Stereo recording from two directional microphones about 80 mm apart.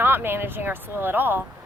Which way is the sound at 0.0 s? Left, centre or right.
Right.